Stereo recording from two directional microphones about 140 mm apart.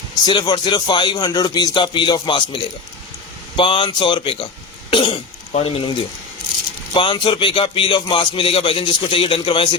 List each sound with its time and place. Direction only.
0.3 s speech: 30° left (ahead or behind)